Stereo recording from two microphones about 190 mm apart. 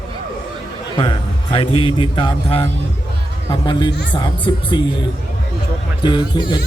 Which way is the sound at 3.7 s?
25° left (ahead or behind).